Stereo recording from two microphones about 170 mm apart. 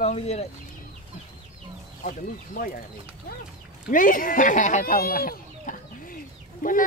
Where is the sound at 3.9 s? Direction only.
55° left (ahead or behind).